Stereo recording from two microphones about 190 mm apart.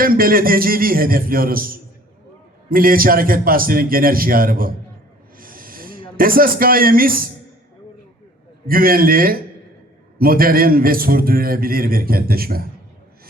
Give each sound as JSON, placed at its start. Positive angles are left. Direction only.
{"t": 0.0, "sound": "a man's voice", "side_deg": -50}
{"t": 5.4, "sound": "snort", "side_deg": -50}
{"t": 6.1, "sound": "a man's voice", "side_deg": -50}
{"t": 8.6, "sound": "a man's voice", "side_deg": -50}